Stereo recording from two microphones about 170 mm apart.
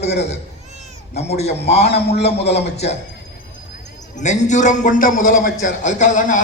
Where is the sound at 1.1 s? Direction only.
40° left (ahead or behind).